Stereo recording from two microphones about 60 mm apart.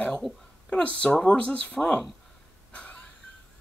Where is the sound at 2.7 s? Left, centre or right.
Centre.